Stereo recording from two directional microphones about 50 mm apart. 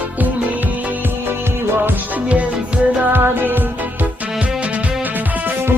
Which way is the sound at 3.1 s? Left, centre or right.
Right.